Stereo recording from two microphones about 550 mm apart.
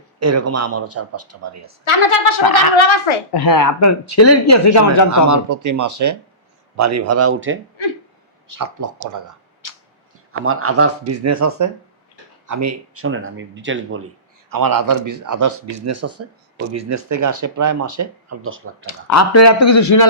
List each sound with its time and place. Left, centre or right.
0.2 s a man's voice: right
1.8 s speech: left
3.4 s speech: left
5.0 s a man's voice: right
8.4 s speech: right
10.4 s a man's voice: right
14.5 s speech: right
18.9 s speech: left